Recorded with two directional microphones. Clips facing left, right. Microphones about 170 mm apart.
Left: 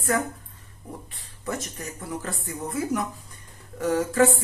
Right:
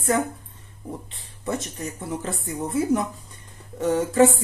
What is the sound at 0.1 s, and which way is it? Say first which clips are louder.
Speech: right 2 dB; 20° right (ahead or behind).